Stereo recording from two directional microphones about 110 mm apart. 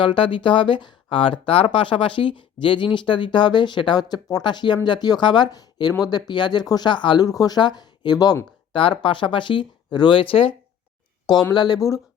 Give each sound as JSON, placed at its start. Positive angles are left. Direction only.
{"t": 0.0, "sound": "speech", "side_deg": 50}
{"t": 7.3, "sound": "speech", "side_deg": 35}
{"t": 8.7, "sound": "speech", "side_deg": 50}
{"t": 11.5, "sound": "speech", "side_deg": 40}